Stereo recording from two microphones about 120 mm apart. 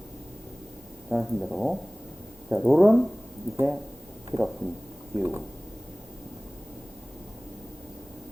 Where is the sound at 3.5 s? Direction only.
20° right (ahead or behind).